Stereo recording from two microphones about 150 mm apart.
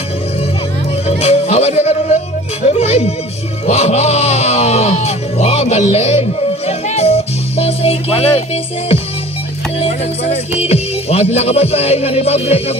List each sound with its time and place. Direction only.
1.0 s speech: 45° left (ahead or behind)
2.7 s music: 45° left (ahead or behind)
9.8 s speech: 45° left (ahead or behind)